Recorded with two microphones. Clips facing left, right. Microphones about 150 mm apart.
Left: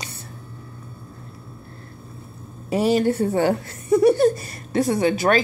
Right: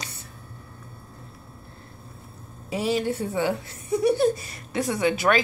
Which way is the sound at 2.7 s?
45° left (ahead or behind).